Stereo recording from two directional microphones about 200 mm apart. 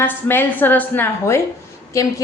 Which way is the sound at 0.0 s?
10° left (ahead or behind).